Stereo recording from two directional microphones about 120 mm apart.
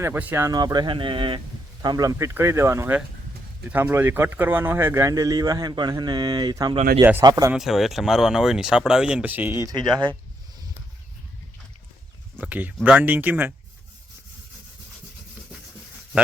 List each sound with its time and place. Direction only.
0.0 s speech: 15° right (ahead or behind)
0.4 s speech: 35° right (ahead or behind)
1.8 s speech: 35° right (ahead or behind)
7.0 s speech: 20° right (ahead or behind)
7.3 s speech: 35° right (ahead or behind)
7.5 s speech: centre (ahead or behind)
9.6 s speech: 35° right (ahead or behind)
12.4 s speech: 15° right (ahead or behind)